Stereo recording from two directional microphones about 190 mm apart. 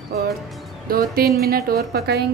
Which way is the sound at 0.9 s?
50° right (ahead or behind).